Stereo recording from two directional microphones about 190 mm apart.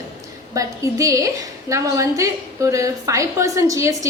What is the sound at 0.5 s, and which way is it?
A woman's voice, 15° right (ahead or behind).